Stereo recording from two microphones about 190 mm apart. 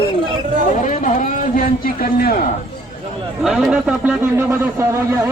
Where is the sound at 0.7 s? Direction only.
40° left (ahead or behind).